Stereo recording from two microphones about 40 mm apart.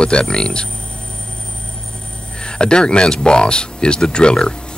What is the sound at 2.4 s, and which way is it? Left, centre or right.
Speech, left.